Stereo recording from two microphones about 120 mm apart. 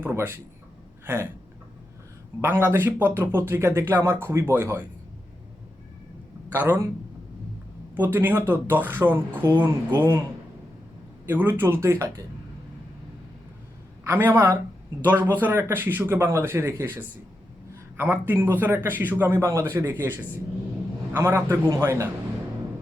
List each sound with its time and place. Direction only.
0.0 s speech: 20° right (ahead or behind)
1.0 s a sound: 20° right (ahead or behind)
2.4 s speech: 15° right (ahead or behind)
6.5 s speech: 15° right (ahead or behind)
7.9 s speech: 15° right (ahead or behind)
11.3 s speech: 15° right (ahead or behind)
14.0 s speech: 20° right (ahead or behind)